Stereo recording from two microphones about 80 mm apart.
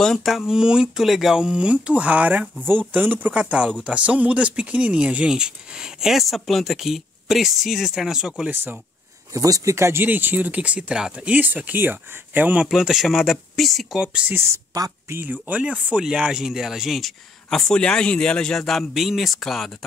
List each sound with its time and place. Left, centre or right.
0.0 s speech: centre
8.5 s speech: right
9.3 s speech: right
10.0 s speech: right
12.6 s speech: centre
14.0 s speech: centre
14.3 s a woman's voice: right; by 19.7 s centre